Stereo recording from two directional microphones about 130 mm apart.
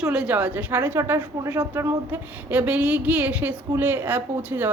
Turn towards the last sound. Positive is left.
turn(degrees=-15)  # may be behind; listen again after turning